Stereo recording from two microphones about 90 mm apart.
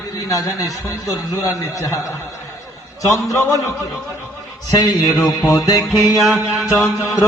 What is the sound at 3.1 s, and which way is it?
Speech, 35° left (ahead or behind).